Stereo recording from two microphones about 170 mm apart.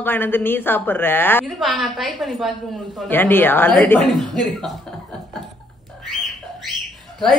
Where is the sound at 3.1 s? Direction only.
10° left (ahead or behind).